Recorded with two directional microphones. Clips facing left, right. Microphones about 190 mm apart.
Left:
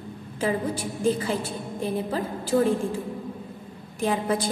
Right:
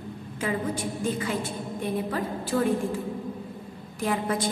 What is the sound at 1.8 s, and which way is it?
Speech, 30° left (ahead or behind).